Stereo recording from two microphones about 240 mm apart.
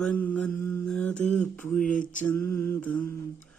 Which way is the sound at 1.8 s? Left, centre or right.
Left.